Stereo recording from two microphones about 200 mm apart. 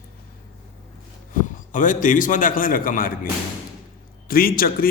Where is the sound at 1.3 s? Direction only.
40° left (ahead or behind).